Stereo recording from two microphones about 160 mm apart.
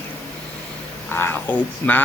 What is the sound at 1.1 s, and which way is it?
Speech, 15° left (ahead or behind).